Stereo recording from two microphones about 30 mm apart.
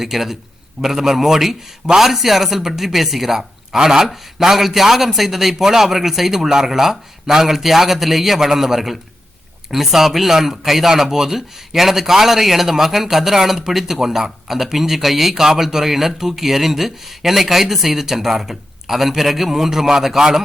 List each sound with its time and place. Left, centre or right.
0.0 s speech: centre